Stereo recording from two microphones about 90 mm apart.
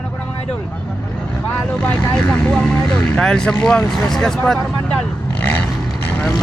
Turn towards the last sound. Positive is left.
turn(degrees=15)  # may be behind; listen again after turning